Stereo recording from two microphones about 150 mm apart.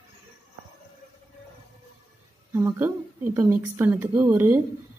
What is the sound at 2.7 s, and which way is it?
Speech, 15° right (ahead or behind).